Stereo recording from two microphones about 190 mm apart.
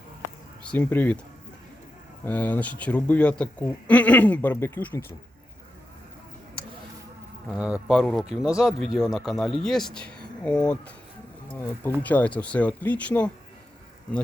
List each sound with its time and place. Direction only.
0.2 s a sound: 5° left (ahead or behind)
2.2 s speech: 10° left (ahead or behind)
7.5 s speech: 5° right (ahead or behind)
12.0 s speech: 10° left (ahead or behind)